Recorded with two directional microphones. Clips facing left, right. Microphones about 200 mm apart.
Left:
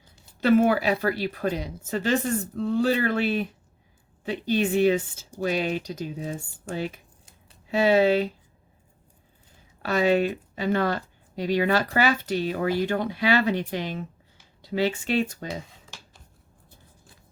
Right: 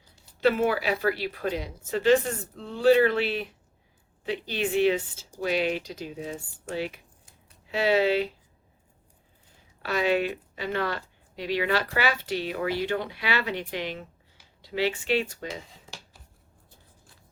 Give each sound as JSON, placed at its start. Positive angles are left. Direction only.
{"t": 0.3, "sound": "speech", "side_deg": 45}
{"t": 6.8, "sound": "a sound", "side_deg": 45}
{"t": 9.8, "sound": "speech", "side_deg": 45}